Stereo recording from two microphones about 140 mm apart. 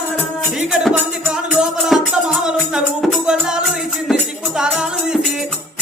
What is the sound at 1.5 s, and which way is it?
Music, 5° right (ahead or behind).